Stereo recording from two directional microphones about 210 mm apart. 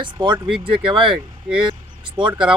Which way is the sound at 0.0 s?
20° right (ahead or behind).